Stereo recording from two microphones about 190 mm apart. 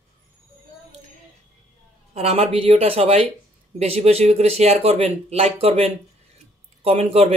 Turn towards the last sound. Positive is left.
turn(degrees=-30)  # may be behind; listen again after turning